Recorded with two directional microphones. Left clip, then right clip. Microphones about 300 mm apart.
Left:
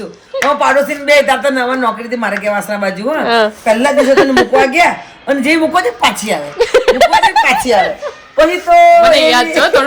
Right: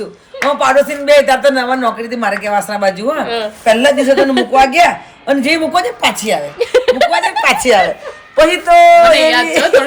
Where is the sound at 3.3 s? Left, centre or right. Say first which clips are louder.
Left 7 dB; left.